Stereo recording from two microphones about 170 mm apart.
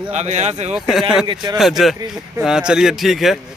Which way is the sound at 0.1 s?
40° right (ahead or behind).